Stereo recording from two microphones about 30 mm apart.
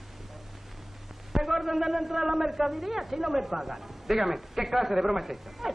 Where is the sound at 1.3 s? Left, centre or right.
Centre.